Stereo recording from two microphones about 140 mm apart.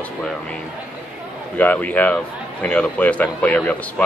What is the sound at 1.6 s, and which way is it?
Speech, 10° left (ahead or behind).